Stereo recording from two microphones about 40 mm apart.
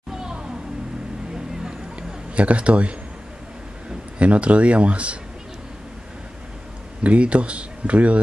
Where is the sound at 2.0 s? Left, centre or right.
Right.